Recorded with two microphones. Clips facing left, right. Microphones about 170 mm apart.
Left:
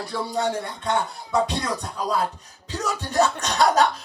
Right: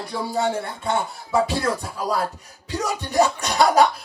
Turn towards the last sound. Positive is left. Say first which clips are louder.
# right 2 dB
turn(degrees=-10)  # may be behind; listen again after turning